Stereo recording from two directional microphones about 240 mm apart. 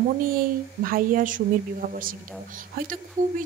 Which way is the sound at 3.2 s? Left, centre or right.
Right.